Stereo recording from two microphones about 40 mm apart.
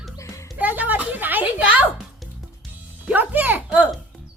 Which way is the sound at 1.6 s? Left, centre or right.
Right.